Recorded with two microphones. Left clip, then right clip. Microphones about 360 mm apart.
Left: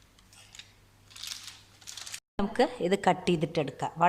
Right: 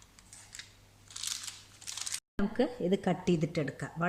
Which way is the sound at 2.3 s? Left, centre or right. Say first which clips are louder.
Left 5 dB; centre.